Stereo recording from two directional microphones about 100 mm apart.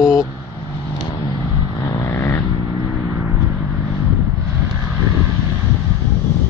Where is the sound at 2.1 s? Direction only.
25° left (ahead or behind).